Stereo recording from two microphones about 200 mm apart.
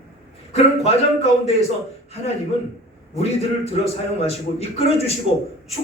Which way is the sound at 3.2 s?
30° left (ahead or behind).